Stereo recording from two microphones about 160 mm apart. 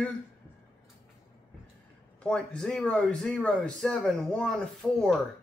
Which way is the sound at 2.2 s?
5° left (ahead or behind).